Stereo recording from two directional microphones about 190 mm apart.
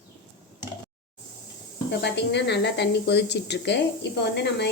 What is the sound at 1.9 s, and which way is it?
Speech, 65° left (ahead or behind).